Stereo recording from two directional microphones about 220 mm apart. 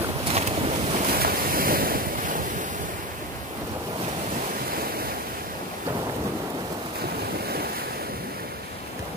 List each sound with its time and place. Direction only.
0.3 s boat: 30° right (ahead or behind)
1.1 s waves: 40° right (ahead or behind)